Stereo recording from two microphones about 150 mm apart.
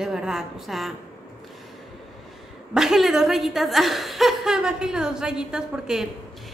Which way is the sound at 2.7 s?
Centre (ahead or behind).